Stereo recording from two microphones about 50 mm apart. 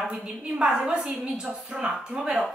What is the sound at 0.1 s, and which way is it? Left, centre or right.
A woman's voice, centre.